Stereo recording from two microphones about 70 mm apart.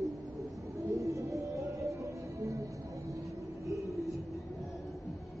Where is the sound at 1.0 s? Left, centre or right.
Right.